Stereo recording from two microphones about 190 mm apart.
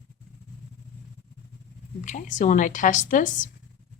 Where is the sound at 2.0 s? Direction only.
40° left (ahead or behind).